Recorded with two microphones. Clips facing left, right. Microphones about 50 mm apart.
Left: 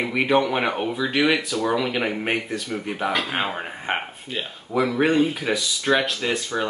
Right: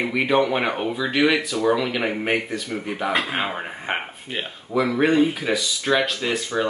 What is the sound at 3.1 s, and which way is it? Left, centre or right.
Speech, right.